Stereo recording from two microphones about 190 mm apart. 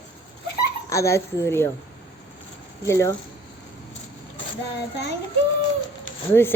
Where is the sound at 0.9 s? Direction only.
15° left (ahead or behind).